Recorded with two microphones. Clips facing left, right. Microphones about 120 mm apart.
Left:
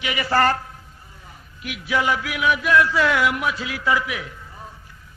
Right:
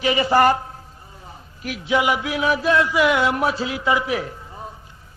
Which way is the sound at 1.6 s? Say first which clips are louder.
Right 3 dB; 40° right (ahead or behind).